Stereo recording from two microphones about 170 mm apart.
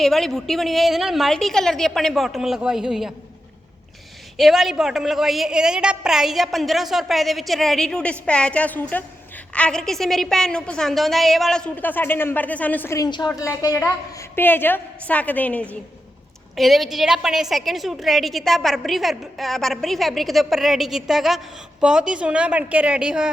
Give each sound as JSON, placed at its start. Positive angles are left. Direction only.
{"t": 0.0, "sound": "a woman's voice", "side_deg": 0}
{"t": 4.4, "sound": "a woman's voice", "side_deg": 0}